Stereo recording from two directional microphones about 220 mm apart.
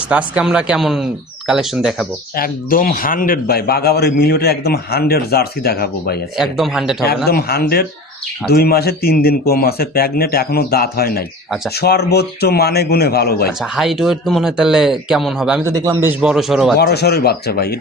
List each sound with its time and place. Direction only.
0.1 s speech: 5° right (ahead or behind)
2.3 s a man's voice: 40° left (ahead or behind)
6.3 s speech: centre (ahead or behind)
7.3 s a man's voice: 45° left (ahead or behind)
13.7 s speech: centre (ahead or behind)
15.7 s speech: 15° right (ahead or behind)
16.7 s a man's voice: 45° left (ahead or behind)